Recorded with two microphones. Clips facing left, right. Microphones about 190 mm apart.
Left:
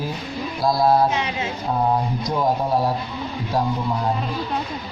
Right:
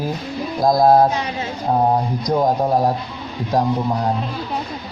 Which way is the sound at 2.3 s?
45° right (ahead or behind).